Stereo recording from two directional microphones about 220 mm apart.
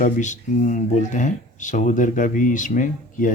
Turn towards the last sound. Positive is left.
turn(degrees=35)  # may be behind; listen again after turning